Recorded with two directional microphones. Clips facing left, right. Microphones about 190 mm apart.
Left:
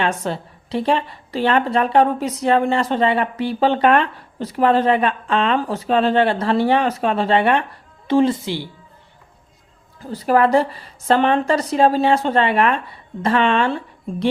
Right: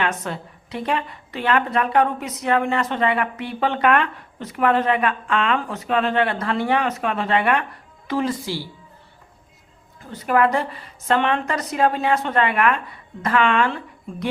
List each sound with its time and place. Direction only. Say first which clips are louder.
0.0 s a woman's voice: left 3 dB; 30° left (ahead or behind)
10.0 s a woman's voice: left 3 dB; 35° left (ahead or behind)